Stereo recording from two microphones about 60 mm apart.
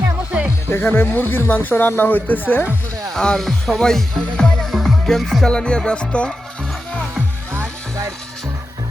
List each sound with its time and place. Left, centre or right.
0.7 s speech: left
3.2 s speech: centre
5.5 s music: centre